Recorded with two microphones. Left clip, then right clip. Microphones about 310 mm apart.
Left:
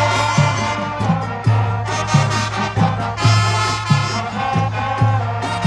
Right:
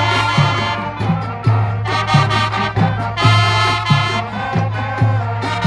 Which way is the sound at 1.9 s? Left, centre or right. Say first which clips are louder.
Right 5 dB; centre.